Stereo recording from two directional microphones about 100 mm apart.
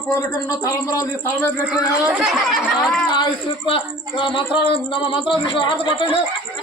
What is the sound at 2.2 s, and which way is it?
Speech, centre (ahead or behind).